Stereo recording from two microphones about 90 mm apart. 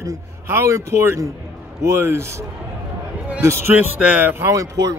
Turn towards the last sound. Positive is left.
turn(degrees=-35)  # may be behind; listen again after turning